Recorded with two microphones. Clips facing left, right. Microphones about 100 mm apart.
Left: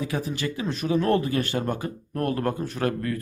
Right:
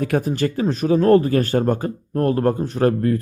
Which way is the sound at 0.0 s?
50° right (ahead or behind).